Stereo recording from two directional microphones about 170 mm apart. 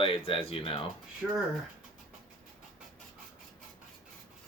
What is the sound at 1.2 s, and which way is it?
Speech, centre (ahead or behind).